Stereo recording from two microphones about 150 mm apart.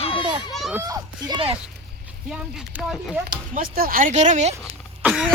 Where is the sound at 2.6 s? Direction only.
5° right (ahead or behind).